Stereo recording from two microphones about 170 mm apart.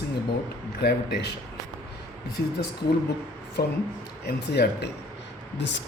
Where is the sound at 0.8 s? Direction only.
75° left (ahead or behind).